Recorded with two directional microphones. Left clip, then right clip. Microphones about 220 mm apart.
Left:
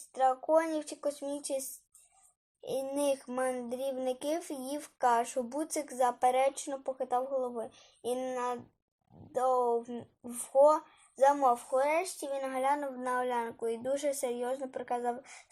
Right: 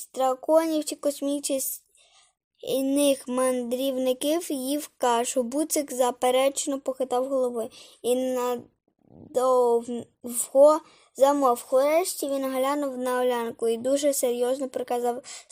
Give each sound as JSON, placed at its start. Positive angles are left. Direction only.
{"t": 0.1, "sound": "speech", "side_deg": -50}
{"t": 2.6, "sound": "speech", "side_deg": -45}